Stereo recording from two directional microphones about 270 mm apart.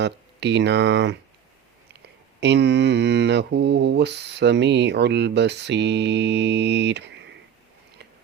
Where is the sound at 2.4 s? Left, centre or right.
Right.